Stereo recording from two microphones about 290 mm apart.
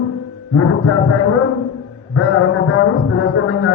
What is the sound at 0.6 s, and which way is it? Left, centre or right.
A man's voice, left.